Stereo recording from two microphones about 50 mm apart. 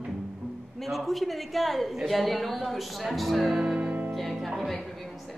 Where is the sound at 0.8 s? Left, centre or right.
Centre.